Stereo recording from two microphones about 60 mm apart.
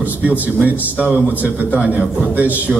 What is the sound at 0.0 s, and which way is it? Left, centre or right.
A man's voice, right.